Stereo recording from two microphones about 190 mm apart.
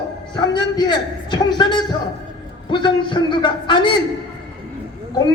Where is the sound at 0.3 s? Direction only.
25° left (ahead or behind).